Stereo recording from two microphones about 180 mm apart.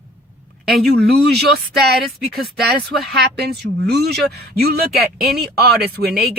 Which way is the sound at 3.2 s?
65° right (ahead or behind).